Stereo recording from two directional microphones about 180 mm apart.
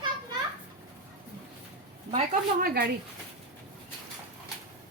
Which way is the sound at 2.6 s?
60° right (ahead or behind).